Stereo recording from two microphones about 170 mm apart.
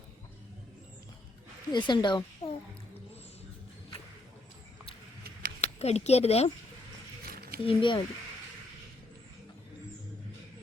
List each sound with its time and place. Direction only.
1.7 s a woman's voice: 25° left (ahead or behind)
5.5 s speech: 40° left (ahead or behind)
7.3 s zipper: 65° right (ahead or behind)
7.6 s speech: 30° left (ahead or behind)